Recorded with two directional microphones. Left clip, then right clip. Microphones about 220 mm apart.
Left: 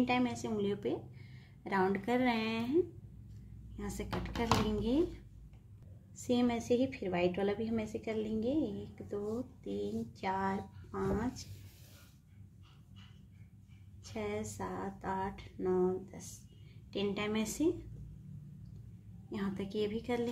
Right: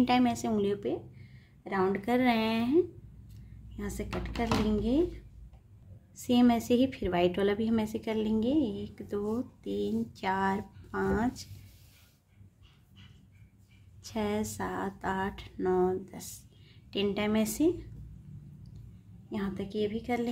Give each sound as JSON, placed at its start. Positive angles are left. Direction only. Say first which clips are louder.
{"t": 0.0, "sound": "a woman's voice", "louder": "right 6 dB", "side_deg": -20}
{"t": 0.7, "sound": "a sound", "louder": "right 3 dB", "side_deg": 0}
{"t": 2.0, "sound": "speech", "louder": "right 5 dB", "side_deg": -10}
{"t": 6.1, "sound": "a woman's voice", "louder": "right 7 dB", "side_deg": -15}
{"t": 14.0, "sound": "a woman's voice", "louder": "right 6 dB", "side_deg": -20}
{"t": 19.3, "sound": "speech", "louder": "right 3 dB", "side_deg": -5}